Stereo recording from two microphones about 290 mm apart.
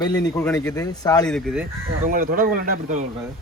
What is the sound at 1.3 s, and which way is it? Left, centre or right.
Speech, centre.